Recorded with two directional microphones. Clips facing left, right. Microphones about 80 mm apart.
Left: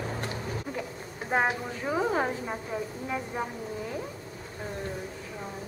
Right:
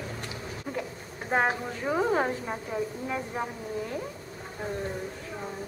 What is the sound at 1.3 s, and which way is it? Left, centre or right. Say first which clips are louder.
A woman's voice: right 1 dB; centre.